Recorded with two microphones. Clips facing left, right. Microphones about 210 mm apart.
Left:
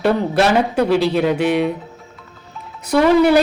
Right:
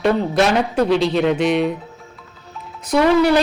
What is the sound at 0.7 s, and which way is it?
Speech, 10° left (ahead or behind).